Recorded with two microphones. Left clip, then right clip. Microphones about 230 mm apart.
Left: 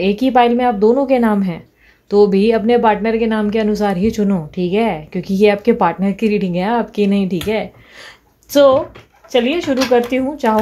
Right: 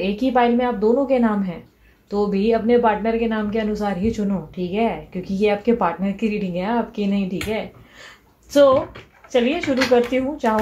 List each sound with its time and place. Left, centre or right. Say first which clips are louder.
0.0 s a woman's voice: left 6 dB; left